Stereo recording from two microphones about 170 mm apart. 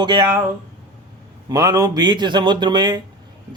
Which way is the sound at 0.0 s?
25° right (ahead or behind).